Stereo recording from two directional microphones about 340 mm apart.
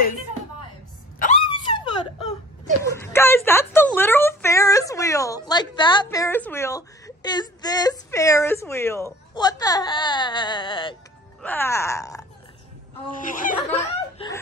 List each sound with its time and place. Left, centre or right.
1.2 s wail: centre
2.8 s a sound: centre
7.2 s speech: centre
13.1 s speech: left
14.1 s speech: centre